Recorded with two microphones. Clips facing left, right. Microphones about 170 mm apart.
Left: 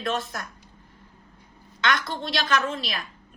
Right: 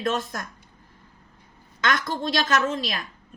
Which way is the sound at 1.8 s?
45° right (ahead or behind).